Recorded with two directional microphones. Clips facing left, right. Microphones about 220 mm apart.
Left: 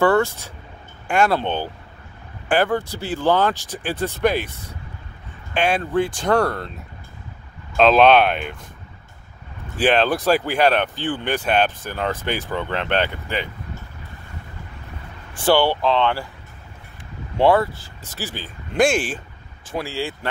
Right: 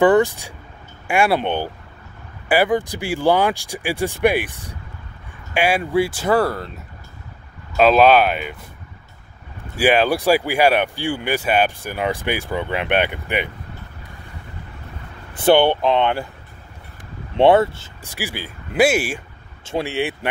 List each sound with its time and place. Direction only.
0.0 s speech: 15° right (ahead or behind)
7.7 s speech: 5° right (ahead or behind)
9.8 s speech: 10° right (ahead or behind)
15.3 s speech: 20° right (ahead or behind)
17.4 s speech: 25° right (ahead or behind)
18.0 s speech: 10° right (ahead or behind)
19.6 s speech: 25° right (ahead or behind)